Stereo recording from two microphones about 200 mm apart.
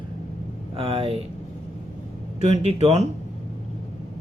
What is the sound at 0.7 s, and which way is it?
Speech, 30° right (ahead or behind).